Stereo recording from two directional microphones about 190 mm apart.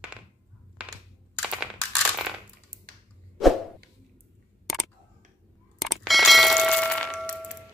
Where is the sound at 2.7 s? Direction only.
45° right (ahead or behind).